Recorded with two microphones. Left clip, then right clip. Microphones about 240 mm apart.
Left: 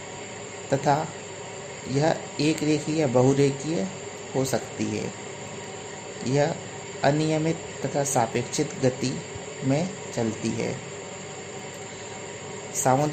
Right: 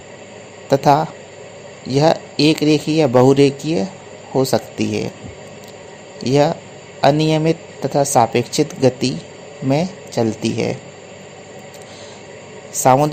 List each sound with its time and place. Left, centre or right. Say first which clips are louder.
0.7 s speech: right 10 dB; right
6.2 s speech: right 9 dB; right
12.7 s a man's voice: right 10 dB; right